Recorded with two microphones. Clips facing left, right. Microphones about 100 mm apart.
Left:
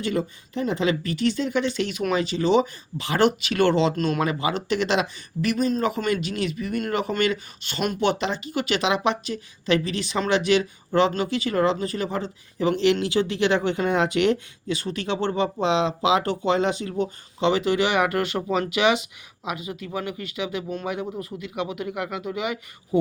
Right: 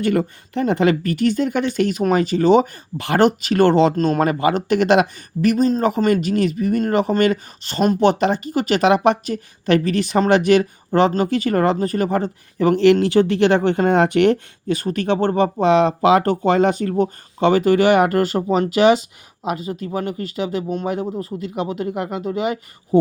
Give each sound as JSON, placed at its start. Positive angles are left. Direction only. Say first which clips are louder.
{"t": 0.0, "sound": "speech", "louder": "right 7 dB", "side_deg": -60}